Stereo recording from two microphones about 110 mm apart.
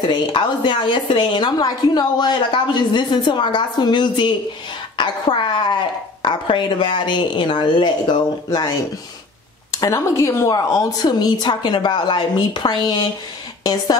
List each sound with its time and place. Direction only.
0.1 s a woman's voice: 45° left (ahead or behind)
4.9 s a sound: 45° left (ahead or behind)
6.2 s a woman's voice: 45° left (ahead or behind)
9.7 s a woman's voice: 25° left (ahead or behind)